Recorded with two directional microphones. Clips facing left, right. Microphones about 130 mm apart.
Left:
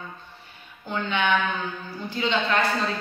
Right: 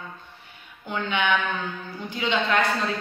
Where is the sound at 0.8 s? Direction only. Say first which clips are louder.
Even; 15° right (ahead or behind).